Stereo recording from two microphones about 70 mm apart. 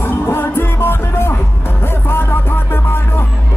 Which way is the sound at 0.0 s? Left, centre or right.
Left.